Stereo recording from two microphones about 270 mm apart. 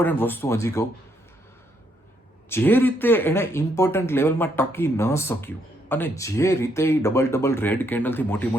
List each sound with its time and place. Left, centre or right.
0.0 s speech: centre
2.5 s speech: centre